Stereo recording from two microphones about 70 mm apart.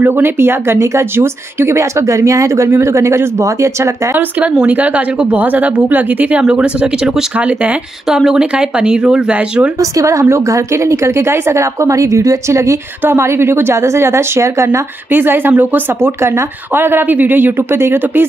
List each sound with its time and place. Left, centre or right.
0.0 s a woman's voice: right
4.2 s a woman's voice: centre
7.3 s a woman's voice: centre
8.1 s speech: centre
9.8 s a woman's voice: right
15.0 s a woman's voice: right
15.9 s speech: right